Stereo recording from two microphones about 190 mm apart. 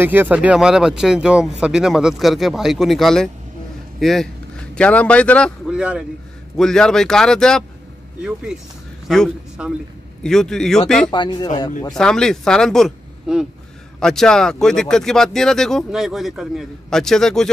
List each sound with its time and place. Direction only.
0.0 s a man's voice: 10° right (ahead or behind); by 5.5 s 5° left (ahead or behind)
5.7 s speech: 5° right (ahead or behind)
9.0 s speech: centre (ahead or behind)
11.1 s speech: 20° left (ahead or behind)
11.9 s speech: 5° left (ahead or behind)